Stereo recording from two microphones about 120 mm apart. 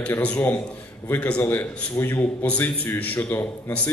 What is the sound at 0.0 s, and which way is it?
A man's voice, 10° left (ahead or behind).